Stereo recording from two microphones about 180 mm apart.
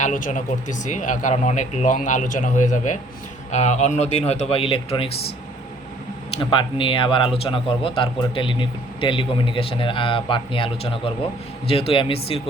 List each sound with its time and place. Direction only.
0.0 s a man's voice: 45° left (ahead or behind)
6.3 s a man's voice: 25° left (ahead or behind)